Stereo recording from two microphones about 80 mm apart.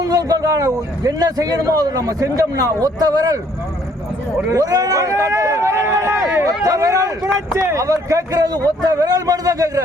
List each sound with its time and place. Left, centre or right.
0.0 s a man's voice: right
4.5 s a sound: right
6.7 s a man's voice: right